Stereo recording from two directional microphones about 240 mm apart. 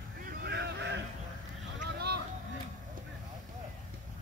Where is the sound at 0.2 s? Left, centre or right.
Right.